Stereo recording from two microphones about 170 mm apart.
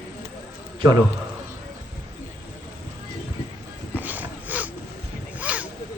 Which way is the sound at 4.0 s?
10° right (ahead or behind).